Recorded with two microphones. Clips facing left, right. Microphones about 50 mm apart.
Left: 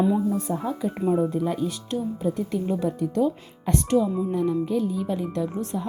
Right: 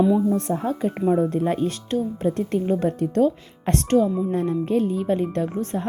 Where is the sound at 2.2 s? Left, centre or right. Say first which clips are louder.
Right 3 dB; right.